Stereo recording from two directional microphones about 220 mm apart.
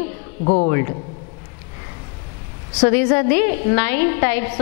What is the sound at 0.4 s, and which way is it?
Speech, 30° left (ahead or behind).